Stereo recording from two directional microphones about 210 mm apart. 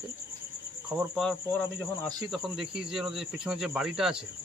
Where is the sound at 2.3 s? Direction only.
Centre (ahead or behind).